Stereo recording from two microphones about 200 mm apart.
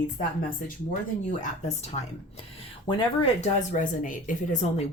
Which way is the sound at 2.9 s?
25° left (ahead or behind).